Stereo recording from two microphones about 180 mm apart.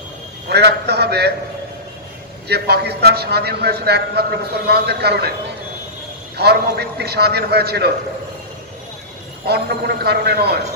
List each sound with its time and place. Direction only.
0.5 s a man's voice: 65° right (ahead or behind)
2.4 s a man's voice: 65° right (ahead or behind)
6.3 s a man's voice: 65° right (ahead or behind)
9.5 s a man's voice: 65° right (ahead or behind)